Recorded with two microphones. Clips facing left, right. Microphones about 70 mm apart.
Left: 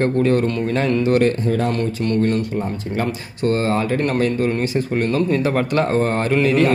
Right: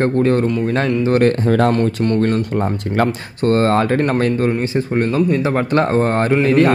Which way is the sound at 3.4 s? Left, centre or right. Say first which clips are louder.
Right 4 dB; right.